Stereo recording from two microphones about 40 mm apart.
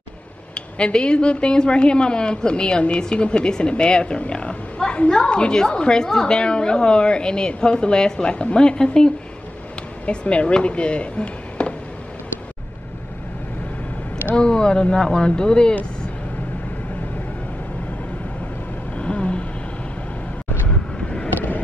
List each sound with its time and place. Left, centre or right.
0.6 s a woman's voice: left
4.3 s roaring cats: left
5.1 s a woman's voice: left
14.3 s a woman's voice: left
18.9 s vehicle: left
20.6 s vehicle: left